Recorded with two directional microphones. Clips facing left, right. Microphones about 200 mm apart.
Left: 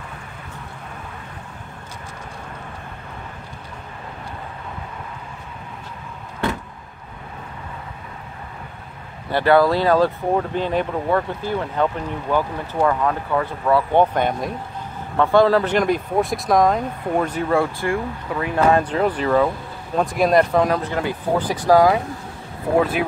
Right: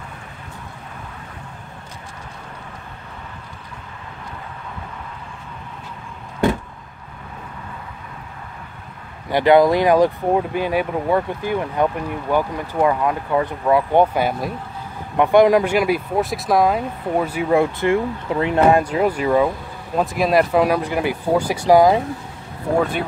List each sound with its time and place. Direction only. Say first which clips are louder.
9.3 s speech: right 2 dB; 15° right (ahead or behind)